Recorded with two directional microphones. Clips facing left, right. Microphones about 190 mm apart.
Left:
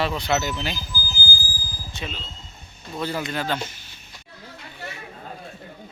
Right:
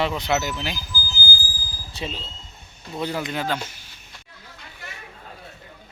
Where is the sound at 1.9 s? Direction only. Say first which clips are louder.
Right 3 dB; 30° right (ahead or behind).